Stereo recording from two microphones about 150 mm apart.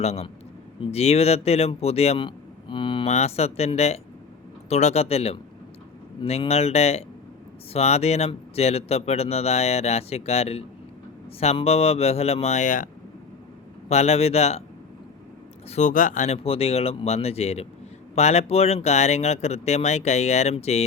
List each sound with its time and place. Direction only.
0.0 s speech: 45° left (ahead or behind)
3.1 s speech: 45° left (ahead or behind)
13.8 s speech: 45° left (ahead or behind)
15.7 s speech: 55° left (ahead or behind)